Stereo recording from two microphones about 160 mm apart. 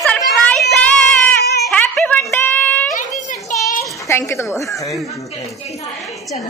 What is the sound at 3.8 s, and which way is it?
A child's voice, 20° left (ahead or behind).